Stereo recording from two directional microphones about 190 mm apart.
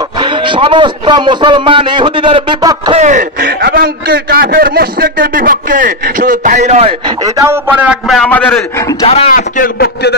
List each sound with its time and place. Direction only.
0.2 s a man's voice: 25° right (ahead or behind)
3.0 s a man's voice: 40° right (ahead or behind)
7.2 s a man's voice: 15° right (ahead or behind); by 8.6 s 5° left (ahead or behind)
9.0 s speech: 30° left (ahead or behind)
9.3 s a man's voice: 50° left (ahead or behind)